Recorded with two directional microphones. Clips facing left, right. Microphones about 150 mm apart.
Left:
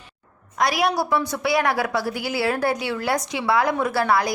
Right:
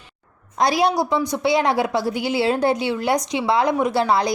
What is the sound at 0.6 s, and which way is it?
A woman's voice, 25° right (ahead or behind).